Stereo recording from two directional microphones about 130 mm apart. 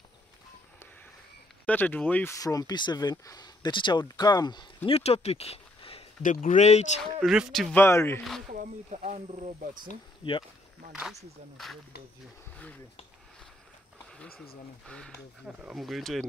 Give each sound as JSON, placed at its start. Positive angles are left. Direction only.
{"t": 1.7, "sound": "speech", "side_deg": 15}
{"t": 2.3, "sound": "speech", "side_deg": 30}
{"t": 4.9, "sound": "speech", "side_deg": 50}
{"t": 6.2, "sound": "speech", "side_deg": 70}
{"t": 7.0, "sound": "speech", "side_deg": 0}
{"t": 7.7, "sound": "speech", "side_deg": 20}
{"t": 8.5, "sound": "speech", "side_deg": -75}
{"t": 10.2, "sound": "speech", "side_deg": 40}
{"t": 10.9, "sound": "speech", "side_deg": -5}
{"t": 14.9, "sound": "speech", "side_deg": 5}
{"t": 15.4, "sound": "speech", "side_deg": -5}